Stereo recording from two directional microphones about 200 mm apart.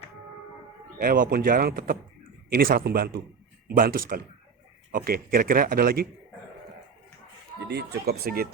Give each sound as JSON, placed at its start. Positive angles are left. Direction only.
{"t": 0.9, "sound": "a man's voice", "side_deg": -45}
{"t": 7.7, "sound": "a man's voice", "side_deg": -55}